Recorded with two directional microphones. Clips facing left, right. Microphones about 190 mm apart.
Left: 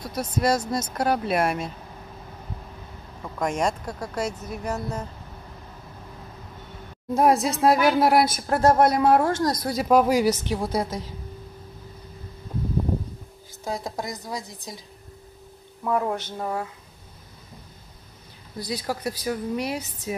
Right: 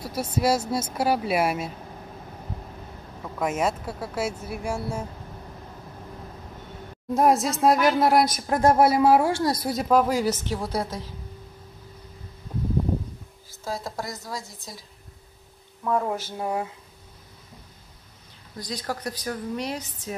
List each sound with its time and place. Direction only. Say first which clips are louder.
0.0 s speech: even; 10° right (ahead or behind)
3.3 s speech: even; 5° right (ahead or behind)
7.2 s a woman's voice: left 1 dB; centre (ahead or behind)
8.5 s speech: even; 15° right (ahead or behind)
9.8 s a woman's voice: left 3 dB; 10° left (ahead or behind)
13.7 s a woman's voice: left 2 dB; 15° left (ahead or behind)
15.8 s speech: left 1 dB; 5° left (ahead or behind)
16.1 s speech: even; 5° right (ahead or behind)
18.6 s a woman's voice: left 3 dB; 10° left (ahead or behind)